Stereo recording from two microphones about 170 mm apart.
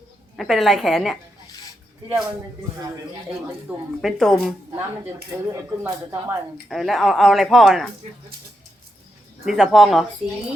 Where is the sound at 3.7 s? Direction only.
Centre (ahead or behind).